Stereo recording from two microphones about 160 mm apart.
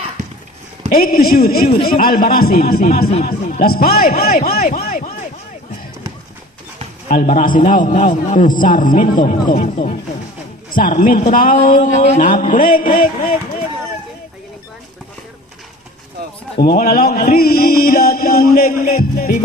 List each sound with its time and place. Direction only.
0.9 s a man's voice: 65° left (ahead or behind)
7.1 s a man's voice: 60° left (ahead or behind)
16.6 s a man's voice: 70° left (ahead or behind)